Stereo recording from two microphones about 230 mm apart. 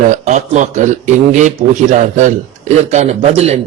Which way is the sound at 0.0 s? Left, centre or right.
Right.